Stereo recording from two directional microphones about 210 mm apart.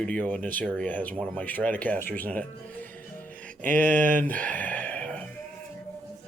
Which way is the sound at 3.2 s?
10° left (ahead or behind).